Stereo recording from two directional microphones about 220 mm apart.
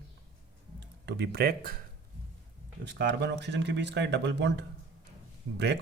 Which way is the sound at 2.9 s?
50° right (ahead or behind).